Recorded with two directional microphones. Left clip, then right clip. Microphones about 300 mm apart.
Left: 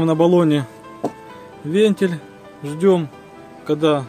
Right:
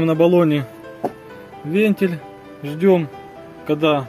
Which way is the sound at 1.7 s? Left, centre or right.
Centre.